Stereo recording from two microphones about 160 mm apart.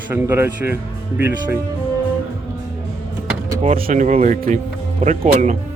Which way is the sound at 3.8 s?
50° right (ahead or behind).